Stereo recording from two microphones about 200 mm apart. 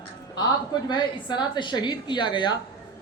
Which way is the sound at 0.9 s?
20° left (ahead or behind).